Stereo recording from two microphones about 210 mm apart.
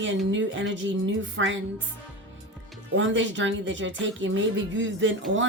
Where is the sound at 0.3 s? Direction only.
60° right (ahead or behind).